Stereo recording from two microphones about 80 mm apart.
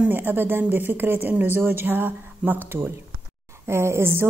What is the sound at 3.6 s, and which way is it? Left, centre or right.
Speech, right.